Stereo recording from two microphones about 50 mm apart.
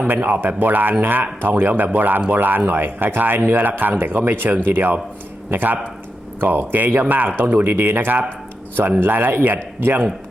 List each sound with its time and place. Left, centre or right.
0.1 s speech: right